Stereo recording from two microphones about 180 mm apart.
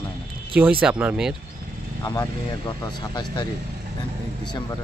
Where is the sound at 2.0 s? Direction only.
20° left (ahead or behind).